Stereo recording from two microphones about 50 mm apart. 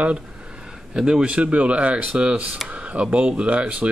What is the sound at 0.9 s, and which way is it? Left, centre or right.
Speech, centre.